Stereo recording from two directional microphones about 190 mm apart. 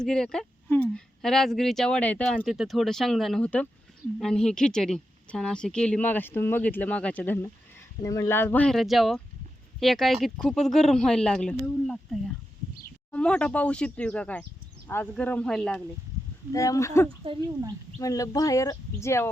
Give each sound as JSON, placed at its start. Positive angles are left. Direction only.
{"t": 0.0, "sound": "a woman's voice", "side_deg": 5}
{"t": 16.5, "sound": "a woman's voice", "side_deg": 15}